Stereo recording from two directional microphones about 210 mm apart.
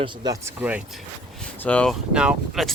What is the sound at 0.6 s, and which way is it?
Speech, 5° right (ahead or behind).